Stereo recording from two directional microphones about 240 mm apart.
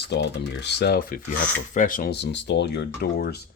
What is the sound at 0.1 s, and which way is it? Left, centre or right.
Speech, left.